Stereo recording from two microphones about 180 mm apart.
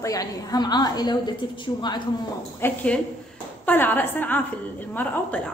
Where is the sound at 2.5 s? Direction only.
10° left (ahead or behind).